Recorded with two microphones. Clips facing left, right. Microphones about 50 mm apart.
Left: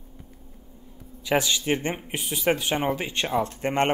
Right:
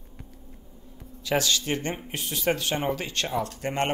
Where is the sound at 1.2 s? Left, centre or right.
Centre.